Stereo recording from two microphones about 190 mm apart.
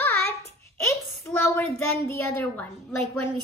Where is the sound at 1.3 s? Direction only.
10° left (ahead or behind).